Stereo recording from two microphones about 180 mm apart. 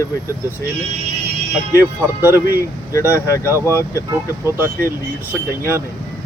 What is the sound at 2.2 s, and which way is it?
Speech, 10° right (ahead or behind).